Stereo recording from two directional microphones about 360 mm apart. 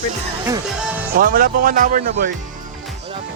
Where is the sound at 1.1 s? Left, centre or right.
Right.